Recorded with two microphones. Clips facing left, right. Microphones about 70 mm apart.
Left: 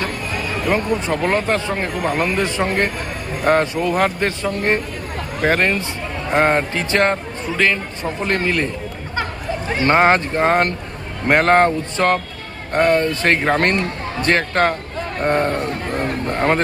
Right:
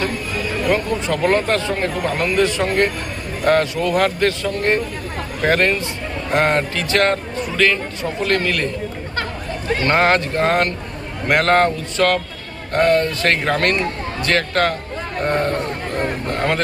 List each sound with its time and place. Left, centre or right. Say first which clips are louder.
0.7 s speech: left 1 dB; centre
1.5 s speech: right 1 dB; left